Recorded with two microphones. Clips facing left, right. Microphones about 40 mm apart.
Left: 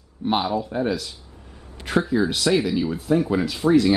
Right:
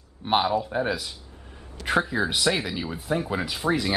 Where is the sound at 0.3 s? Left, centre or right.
Centre.